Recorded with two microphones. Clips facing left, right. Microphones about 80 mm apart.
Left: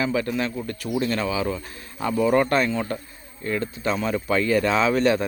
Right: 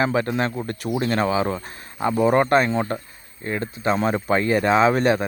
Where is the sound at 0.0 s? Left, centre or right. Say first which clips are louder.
Right 3 dB; right.